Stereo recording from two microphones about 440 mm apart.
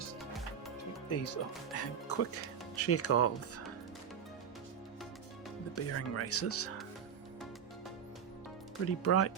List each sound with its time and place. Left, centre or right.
1.2 s speech: left
5.7 s speech: left
9.0 s speech: left